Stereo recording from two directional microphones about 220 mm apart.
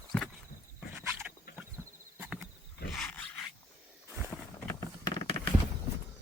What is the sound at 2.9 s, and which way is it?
Dog, 5° left (ahead or behind).